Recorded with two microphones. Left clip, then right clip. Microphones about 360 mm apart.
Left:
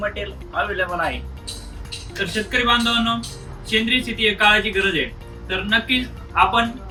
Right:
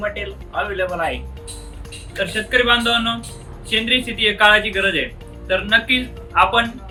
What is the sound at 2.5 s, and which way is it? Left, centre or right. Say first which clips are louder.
A man's voice: right 3 dB; centre.